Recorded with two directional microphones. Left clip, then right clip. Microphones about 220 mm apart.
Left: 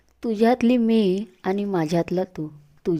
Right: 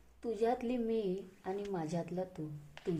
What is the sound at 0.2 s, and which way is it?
A woman's voice, 45° left (ahead or behind).